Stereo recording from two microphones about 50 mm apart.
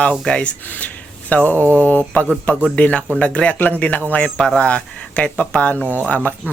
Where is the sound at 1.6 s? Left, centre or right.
Right.